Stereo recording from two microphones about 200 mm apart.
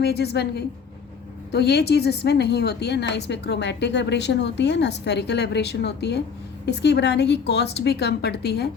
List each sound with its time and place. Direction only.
0.0 s a woman's voice: 55° left (ahead or behind)